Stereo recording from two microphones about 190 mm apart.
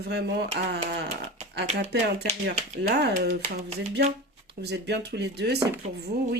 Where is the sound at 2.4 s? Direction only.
60° right (ahead or behind).